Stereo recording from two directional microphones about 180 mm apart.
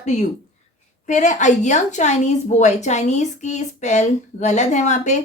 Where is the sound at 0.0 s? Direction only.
40° left (ahead or behind).